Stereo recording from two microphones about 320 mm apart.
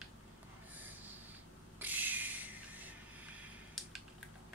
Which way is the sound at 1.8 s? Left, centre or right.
Centre.